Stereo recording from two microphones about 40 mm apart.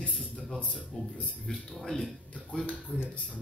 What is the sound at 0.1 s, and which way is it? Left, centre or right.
Music, centre.